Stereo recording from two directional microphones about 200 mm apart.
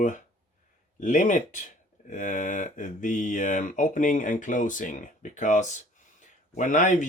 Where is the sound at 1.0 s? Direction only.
40° left (ahead or behind).